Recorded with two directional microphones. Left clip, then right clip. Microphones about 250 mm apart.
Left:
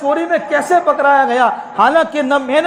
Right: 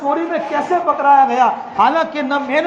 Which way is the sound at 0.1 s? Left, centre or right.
Left.